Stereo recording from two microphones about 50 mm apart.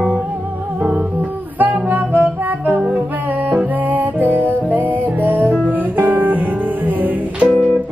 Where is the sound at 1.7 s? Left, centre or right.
Right.